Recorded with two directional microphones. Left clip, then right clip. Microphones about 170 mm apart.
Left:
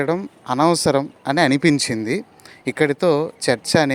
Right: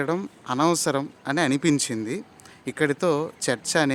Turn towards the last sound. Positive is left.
turn(degrees=20)  # may be behind; listen again after turning